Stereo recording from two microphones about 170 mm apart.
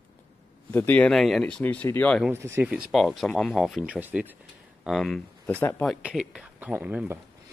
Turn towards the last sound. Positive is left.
turn(degrees=-10)  # may be behind; listen again after turning